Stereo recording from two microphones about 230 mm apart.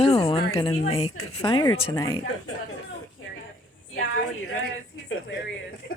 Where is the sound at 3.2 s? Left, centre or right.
Left.